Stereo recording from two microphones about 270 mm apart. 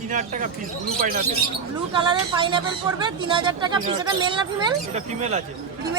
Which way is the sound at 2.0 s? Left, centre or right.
Centre.